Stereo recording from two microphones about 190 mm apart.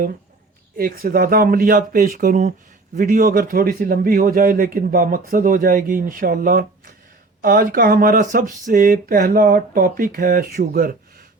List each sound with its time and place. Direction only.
0.8 s a man's voice: 50° right (ahead or behind)